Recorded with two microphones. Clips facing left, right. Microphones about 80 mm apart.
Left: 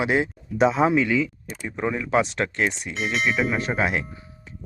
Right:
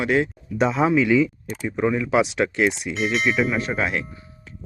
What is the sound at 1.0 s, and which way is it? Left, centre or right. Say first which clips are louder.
Speech: right 5 dB; centre.